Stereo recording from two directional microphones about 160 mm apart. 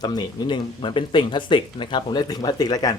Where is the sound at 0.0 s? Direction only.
30° left (ahead or behind).